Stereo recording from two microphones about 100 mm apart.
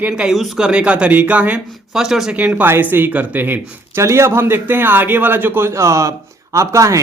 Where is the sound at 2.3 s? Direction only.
15° right (ahead or behind).